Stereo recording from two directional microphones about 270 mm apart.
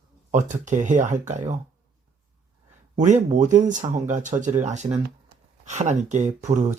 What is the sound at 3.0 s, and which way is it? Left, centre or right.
Speech, right.